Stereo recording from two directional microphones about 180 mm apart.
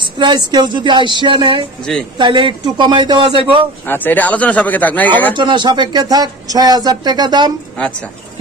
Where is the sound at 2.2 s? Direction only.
25° right (ahead or behind).